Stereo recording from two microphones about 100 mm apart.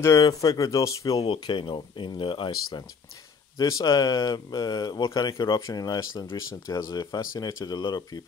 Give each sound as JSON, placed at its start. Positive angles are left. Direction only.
{"t": 0.0, "sound": "speech", "side_deg": 35}
{"t": 1.2, "sound": "speech", "side_deg": 55}
{"t": 3.5, "sound": "speech", "side_deg": 35}